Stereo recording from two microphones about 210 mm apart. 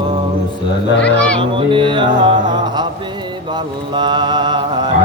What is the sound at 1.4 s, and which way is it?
Music, 25° right (ahead or behind).